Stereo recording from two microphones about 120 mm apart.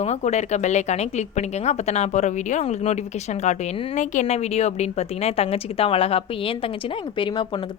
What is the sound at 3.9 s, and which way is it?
A woman's voice, 90° left.